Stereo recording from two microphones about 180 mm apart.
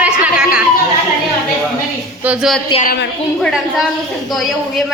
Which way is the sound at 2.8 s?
55° left (ahead or behind).